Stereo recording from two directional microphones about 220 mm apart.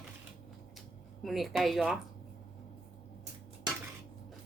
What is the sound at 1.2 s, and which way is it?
Speech, centre (ahead or behind).